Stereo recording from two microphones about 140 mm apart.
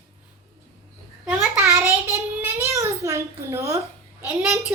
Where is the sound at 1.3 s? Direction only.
15° right (ahead or behind).